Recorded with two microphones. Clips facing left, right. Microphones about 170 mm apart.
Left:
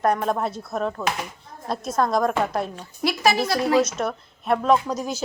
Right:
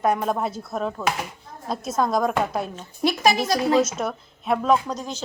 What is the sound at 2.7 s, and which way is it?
A woman's voice, 20° right (ahead or behind).